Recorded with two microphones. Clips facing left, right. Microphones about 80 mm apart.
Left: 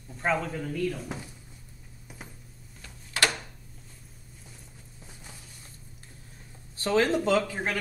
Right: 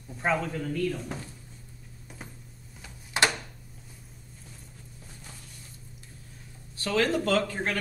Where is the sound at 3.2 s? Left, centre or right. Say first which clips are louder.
Right 2 dB; right.